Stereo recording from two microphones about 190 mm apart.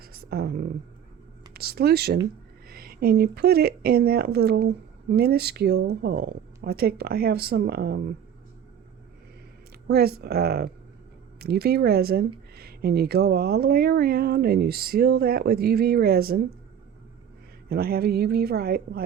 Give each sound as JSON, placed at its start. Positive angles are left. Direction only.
{"t": 0.0, "sound": "a sound", "side_deg": -55}
{"t": 1.5, "sound": "speech", "side_deg": -55}
{"t": 9.8, "sound": "speech", "side_deg": -55}
{"t": 17.7, "sound": "a woman's voice", "side_deg": -55}